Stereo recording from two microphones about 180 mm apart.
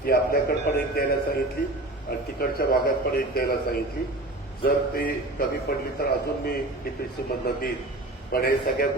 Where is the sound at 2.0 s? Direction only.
55° left (ahead or behind).